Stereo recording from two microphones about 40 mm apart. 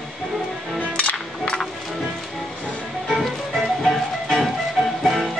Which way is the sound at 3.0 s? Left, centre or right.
Centre.